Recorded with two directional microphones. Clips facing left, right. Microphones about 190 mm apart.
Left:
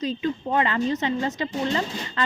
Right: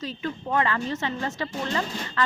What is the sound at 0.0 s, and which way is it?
A woman's voice, 20° left (ahead or behind).